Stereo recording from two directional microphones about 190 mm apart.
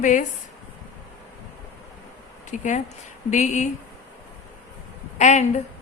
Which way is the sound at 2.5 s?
40° left (ahead or behind).